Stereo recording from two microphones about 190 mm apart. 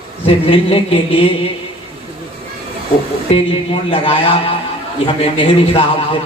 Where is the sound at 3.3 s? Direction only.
30° left (ahead or behind).